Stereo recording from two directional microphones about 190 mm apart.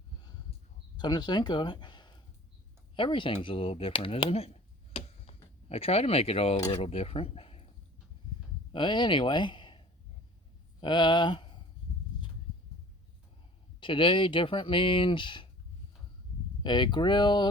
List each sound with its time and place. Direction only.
0.2 s a sound: 20° left (ahead or behind)
0.9 s speech: 20° left (ahead or behind)
4.9 s tick-tock: 35° left (ahead or behind)
5.6 s speech: 30° left (ahead or behind)
8.7 s speech: 25° left (ahead or behind)
13.7 s speech: 25° left (ahead or behind)
16.6 s speech: 25° left (ahead or behind)